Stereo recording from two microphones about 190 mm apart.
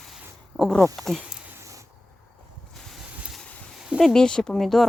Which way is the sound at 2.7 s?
Centre (ahead or behind).